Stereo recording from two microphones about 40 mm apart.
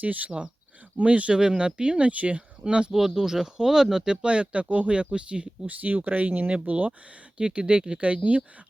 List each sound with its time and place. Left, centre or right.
0.0 s speech: right
1.4 s speech: right
3.2 s speech: centre; by 5.7 s right
6.1 s speech: right
7.3 s speech: right
8.0 s speech: right